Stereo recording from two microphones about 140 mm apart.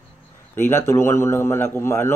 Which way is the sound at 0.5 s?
15° left (ahead or behind).